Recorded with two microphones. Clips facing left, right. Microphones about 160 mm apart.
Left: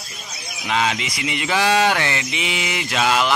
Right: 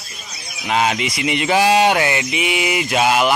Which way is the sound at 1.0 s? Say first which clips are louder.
Right 5 dB; 20° right (ahead or behind).